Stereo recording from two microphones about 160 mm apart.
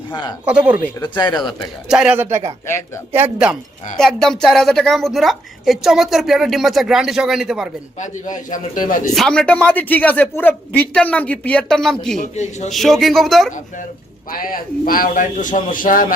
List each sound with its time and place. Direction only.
0.1 s speech: 30° left (ahead or behind)
0.4 s speech: 10° right (ahead or behind)
0.9 s speech: 25° left (ahead or behind)
1.9 s speech: 5° right (ahead or behind)
2.6 s a man's voice: 15° left (ahead or behind)
3.1 s speech: 10° right (ahead or behind)
3.9 s a woman's voice: 5° left (ahead or behind)
7.9 s a man's voice: 50° left (ahead or behind)
9.1 s a man's voice: 5° left (ahead or behind)
12.2 s a man's voice: 45° left (ahead or behind)
12.7 s a woman's voice: centre (ahead or behind)
14.3 s a man's voice: 60° left (ahead or behind)